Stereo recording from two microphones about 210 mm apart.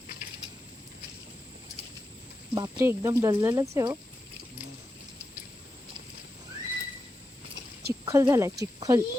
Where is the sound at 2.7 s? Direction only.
10° right (ahead or behind).